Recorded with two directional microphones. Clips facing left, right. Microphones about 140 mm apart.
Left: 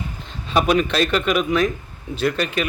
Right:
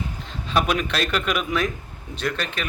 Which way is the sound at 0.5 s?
Centre (ahead or behind).